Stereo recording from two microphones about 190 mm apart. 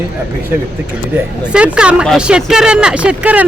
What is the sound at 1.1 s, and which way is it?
Speech, 5° right (ahead or behind).